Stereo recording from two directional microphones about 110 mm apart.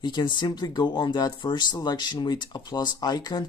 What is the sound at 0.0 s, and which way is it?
Speech, 45° left (ahead or behind).